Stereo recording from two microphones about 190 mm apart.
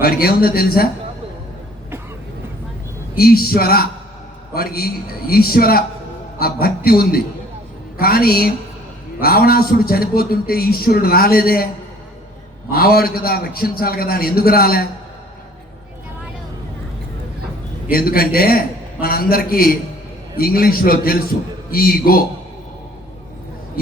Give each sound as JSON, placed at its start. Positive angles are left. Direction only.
{"t": 0.0, "sound": "a man's voice", "side_deg": 50}
{"t": 3.2, "sound": "a man's voice", "side_deg": 55}
{"t": 12.7, "sound": "a man's voice", "side_deg": 50}
{"t": 17.9, "sound": "a man's voice", "side_deg": 50}